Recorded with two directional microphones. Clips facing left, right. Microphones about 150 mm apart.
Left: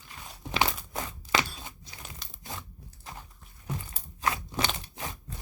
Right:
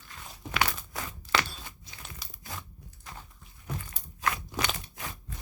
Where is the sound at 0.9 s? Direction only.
20° left (ahead or behind).